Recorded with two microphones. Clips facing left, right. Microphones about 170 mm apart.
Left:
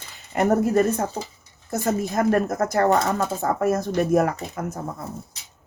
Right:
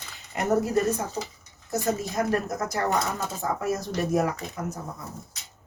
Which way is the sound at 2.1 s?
55° left (ahead or behind).